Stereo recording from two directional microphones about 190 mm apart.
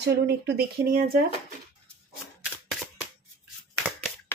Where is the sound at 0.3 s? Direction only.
55° right (ahead or behind).